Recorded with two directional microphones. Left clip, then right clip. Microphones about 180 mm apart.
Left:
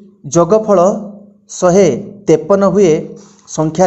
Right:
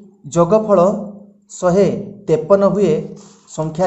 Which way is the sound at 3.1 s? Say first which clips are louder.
Left 4 dB; 10° left (ahead or behind).